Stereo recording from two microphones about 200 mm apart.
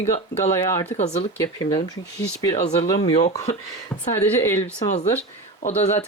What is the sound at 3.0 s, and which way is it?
Speech, 30° left (ahead or behind).